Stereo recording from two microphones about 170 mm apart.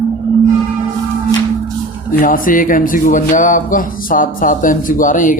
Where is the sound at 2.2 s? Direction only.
55° left (ahead or behind).